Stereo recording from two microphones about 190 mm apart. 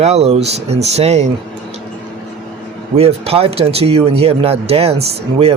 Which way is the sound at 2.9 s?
30° right (ahead or behind).